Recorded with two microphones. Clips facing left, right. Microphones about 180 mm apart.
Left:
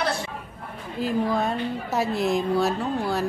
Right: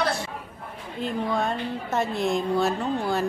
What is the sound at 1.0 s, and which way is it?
A woman's voice, 5° left (ahead or behind).